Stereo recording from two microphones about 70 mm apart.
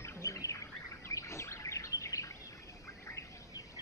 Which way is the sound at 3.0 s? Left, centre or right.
Left.